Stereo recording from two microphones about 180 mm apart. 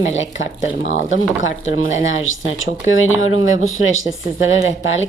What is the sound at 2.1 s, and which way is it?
Speech, 90° left.